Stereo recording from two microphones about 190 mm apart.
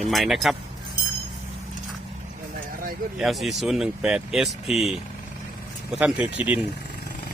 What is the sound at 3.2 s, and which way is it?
Speech, centre (ahead or behind).